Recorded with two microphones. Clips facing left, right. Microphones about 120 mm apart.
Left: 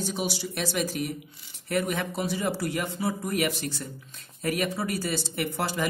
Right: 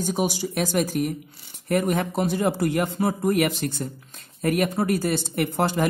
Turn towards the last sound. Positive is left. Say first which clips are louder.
# right 6 dB
turn(degrees=-50)  # may be behind; listen again after turning